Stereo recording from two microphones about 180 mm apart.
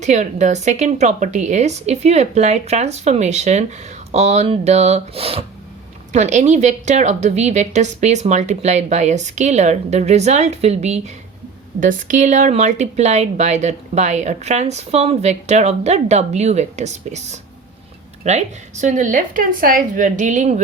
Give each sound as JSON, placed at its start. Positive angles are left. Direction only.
{"t": 0.0, "sound": "speech", "side_deg": -40}